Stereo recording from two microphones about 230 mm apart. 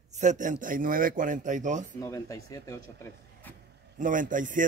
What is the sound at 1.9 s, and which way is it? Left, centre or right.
Speech, centre.